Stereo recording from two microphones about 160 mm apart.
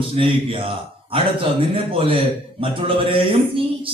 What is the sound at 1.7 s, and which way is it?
Speech, 35° right (ahead or behind).